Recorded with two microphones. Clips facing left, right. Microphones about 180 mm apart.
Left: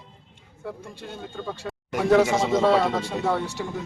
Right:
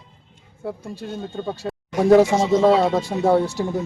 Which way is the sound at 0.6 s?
35° right (ahead or behind).